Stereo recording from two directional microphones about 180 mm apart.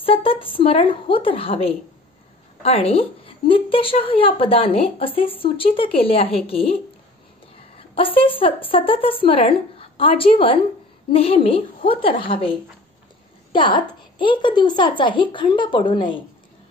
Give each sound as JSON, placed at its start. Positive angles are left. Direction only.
{"t": 0.0, "sound": "a woman's voice", "side_deg": 30}
{"t": 7.9, "sound": "a woman's voice", "side_deg": 30}